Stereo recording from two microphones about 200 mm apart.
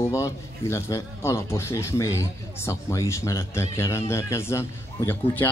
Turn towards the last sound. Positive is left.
turn(degrees=10)  # may be behind; listen again after turning